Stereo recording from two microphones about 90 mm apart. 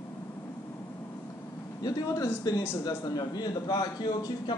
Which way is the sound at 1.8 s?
40° left (ahead or behind).